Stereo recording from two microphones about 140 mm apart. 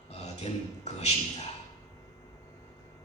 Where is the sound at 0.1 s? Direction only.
50° left (ahead or behind).